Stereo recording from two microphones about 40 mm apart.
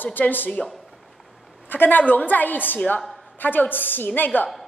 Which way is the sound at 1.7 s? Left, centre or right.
Left.